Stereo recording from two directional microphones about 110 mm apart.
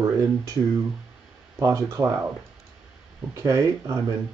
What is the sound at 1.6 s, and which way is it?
Speech, 25° right (ahead or behind).